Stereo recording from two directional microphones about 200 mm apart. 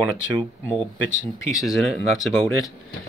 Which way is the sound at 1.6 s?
Centre (ahead or behind).